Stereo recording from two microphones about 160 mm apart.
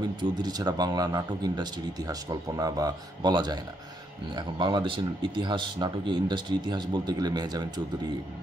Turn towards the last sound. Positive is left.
turn(degrees=-25)  # may be behind; listen again after turning